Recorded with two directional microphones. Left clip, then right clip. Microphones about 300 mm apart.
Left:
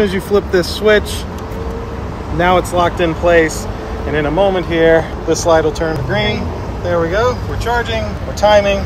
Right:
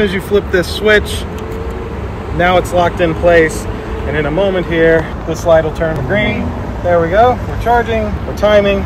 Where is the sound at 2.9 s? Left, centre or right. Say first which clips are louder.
Right 2 dB; left.